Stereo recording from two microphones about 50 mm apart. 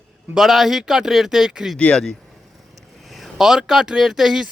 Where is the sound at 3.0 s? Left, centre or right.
Centre.